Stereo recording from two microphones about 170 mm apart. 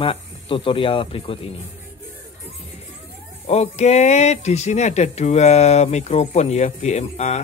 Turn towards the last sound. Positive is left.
turn(degrees=45)  # may be behind; listen again after turning